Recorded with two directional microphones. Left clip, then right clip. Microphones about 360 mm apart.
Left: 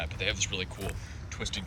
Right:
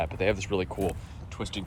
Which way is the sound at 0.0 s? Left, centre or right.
Centre.